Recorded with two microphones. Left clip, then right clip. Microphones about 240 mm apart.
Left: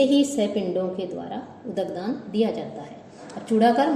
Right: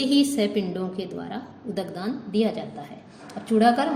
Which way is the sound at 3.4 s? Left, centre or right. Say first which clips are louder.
Left 1 dB; right.